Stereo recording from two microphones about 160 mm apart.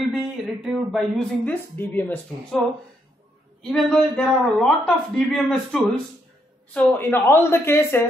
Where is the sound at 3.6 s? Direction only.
5° left (ahead or behind).